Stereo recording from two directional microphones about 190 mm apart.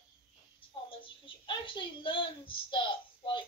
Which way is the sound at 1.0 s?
25° left (ahead or behind).